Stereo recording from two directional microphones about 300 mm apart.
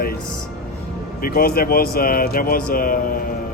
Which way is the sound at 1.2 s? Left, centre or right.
Left.